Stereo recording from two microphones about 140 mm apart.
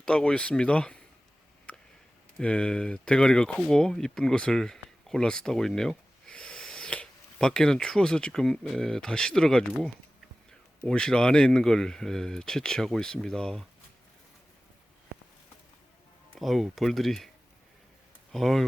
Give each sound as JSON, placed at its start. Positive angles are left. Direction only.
{"t": 0.0, "sound": "speech", "side_deg": 5}
{"t": 1.7, "sound": "a sound", "side_deg": 10}
{"t": 2.4, "sound": "speech", "side_deg": 10}
{"t": 10.8, "sound": "speech", "side_deg": 5}
{"t": 16.3, "sound": "speech", "side_deg": 0}
{"t": 18.3, "sound": "speech", "side_deg": 0}